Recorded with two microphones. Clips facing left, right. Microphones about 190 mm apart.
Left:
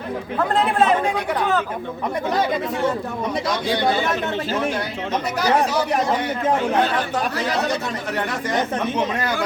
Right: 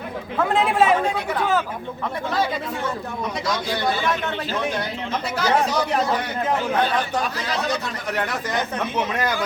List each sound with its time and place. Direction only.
0.3 s speech: 5° right (ahead or behind)
1.0 s speech: 10° left (ahead or behind)